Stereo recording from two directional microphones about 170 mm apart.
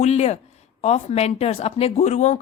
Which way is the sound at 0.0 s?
40° left (ahead or behind).